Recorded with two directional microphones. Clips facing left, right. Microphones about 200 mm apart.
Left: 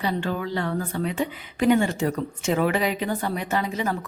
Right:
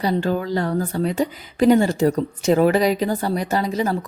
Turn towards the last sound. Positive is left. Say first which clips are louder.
# right 5 dB
turn(degrees=-35)  # may be behind; listen again after turning